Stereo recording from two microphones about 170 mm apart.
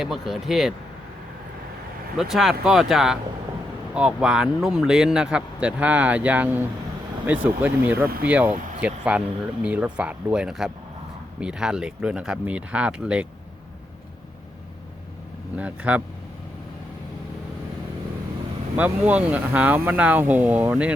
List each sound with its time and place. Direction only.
0.0 s speech: centre (ahead or behind)
2.1 s speech: centre (ahead or behind)
15.5 s speech: 5° right (ahead or behind)
18.8 s speech: 10° right (ahead or behind)